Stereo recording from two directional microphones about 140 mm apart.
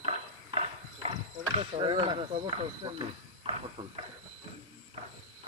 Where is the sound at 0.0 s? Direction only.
45° right (ahead or behind).